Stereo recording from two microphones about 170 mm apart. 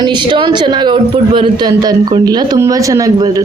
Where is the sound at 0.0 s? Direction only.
25° right (ahead or behind).